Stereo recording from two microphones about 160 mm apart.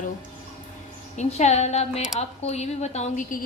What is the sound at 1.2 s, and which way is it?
Speech, 45° left (ahead or behind).